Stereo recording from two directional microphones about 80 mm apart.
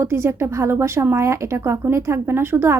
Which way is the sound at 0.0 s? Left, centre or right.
Right.